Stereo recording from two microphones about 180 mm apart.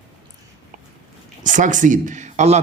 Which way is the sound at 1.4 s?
45° right (ahead or behind).